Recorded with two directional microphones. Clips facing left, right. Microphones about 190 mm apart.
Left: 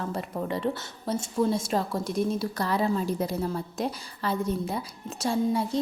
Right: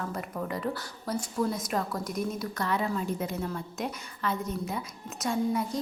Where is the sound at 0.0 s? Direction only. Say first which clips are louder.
Left 3 dB; 30° left (ahead or behind).